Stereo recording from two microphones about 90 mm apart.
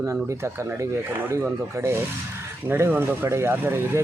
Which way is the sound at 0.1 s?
30° right (ahead or behind).